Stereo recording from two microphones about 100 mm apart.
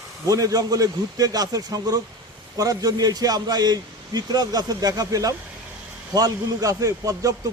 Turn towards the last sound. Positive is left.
turn(degrees=-35)  # may be behind; listen again after turning